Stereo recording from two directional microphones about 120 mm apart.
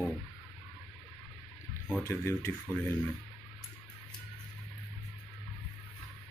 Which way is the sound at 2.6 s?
10° left (ahead or behind).